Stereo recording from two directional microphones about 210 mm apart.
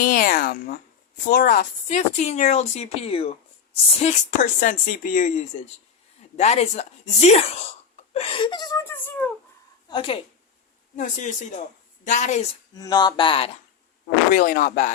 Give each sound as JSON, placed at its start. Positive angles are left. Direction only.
{"t": 0.0, "sound": "speech", "side_deg": 40}
{"t": 9.9, "sound": "speech", "side_deg": 25}
{"t": 12.7, "sound": "speech", "side_deg": 20}
{"t": 14.3, "sound": "speech", "side_deg": 40}